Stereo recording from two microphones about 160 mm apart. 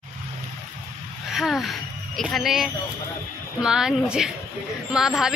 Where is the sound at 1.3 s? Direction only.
Centre (ahead or behind).